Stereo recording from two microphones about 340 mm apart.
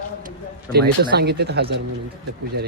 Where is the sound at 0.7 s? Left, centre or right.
Right.